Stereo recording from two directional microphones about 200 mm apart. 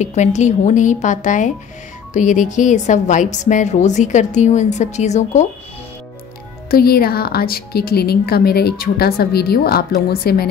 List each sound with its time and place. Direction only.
0.0 s a woman's voice: 35° left (ahead or behind)
6.7 s a woman's voice: 50° left (ahead or behind)